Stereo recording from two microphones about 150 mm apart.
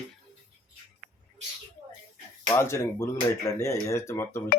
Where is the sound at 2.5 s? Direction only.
15° left (ahead or behind).